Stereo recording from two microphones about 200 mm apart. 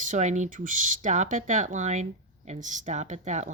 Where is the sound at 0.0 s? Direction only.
40° right (ahead or behind).